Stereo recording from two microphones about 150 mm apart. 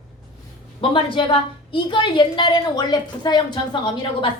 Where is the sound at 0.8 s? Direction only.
35° left (ahead or behind).